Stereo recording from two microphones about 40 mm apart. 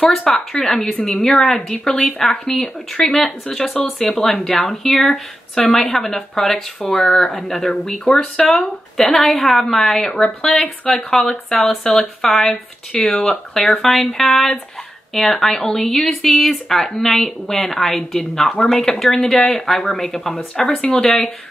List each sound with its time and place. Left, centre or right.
0.1 s speech: centre
1.3 s speech: centre
13.6 s speech: centre
20.8 s speech: left